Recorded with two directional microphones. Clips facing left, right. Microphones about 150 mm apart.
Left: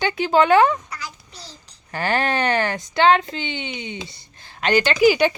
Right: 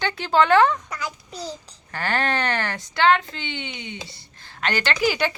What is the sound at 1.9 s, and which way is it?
A woman's voice, 15° left (ahead or behind).